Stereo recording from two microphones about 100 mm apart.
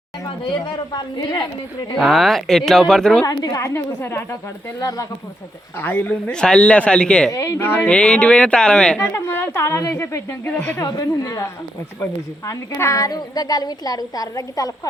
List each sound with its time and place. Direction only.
2.0 s speech: centre (ahead or behind)
3.2 s a woman's voice: 40° left (ahead or behind)
3.8 s a woman's voice: 25° left (ahead or behind)
4.8 s a woman's voice: 35° left (ahead or behind)
5.8 s speech: 20° left (ahead or behind)
7.3 s a woman's voice: 35° left (ahead or behind)
7.6 s speech: 20° left (ahead or behind)
9.0 s a woman's voice: 25° left (ahead or behind)
10.8 s a woman's voice: 35° left (ahead or behind)